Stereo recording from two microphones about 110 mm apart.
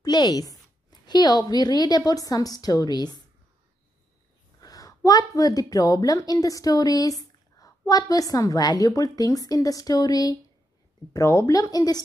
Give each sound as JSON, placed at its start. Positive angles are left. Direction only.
{"t": 0.0, "sound": "a woman's voice", "side_deg": 35}
{"t": 4.6, "sound": "a woman's voice", "side_deg": 35}